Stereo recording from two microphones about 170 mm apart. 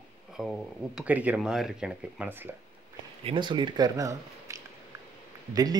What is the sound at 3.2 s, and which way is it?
Speech, 30° right (ahead or behind).